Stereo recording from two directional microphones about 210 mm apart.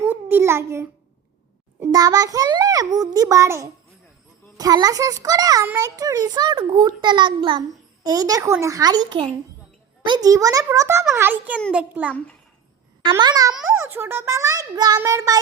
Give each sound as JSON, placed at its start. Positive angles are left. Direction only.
{"t": 0.0, "sound": "a sound", "side_deg": -10}
{"t": 1.8, "sound": "a child's voice", "side_deg": -15}
{"t": 13.1, "sound": "a child's voice", "side_deg": -20}